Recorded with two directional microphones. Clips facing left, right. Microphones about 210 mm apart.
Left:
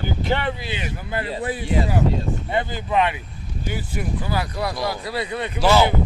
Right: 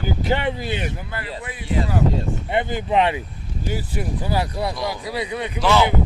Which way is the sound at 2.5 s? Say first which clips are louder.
Right 3 dB; 20° right (ahead or behind).